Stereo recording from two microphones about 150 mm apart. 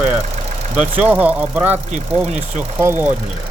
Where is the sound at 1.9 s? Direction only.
55° right (ahead or behind).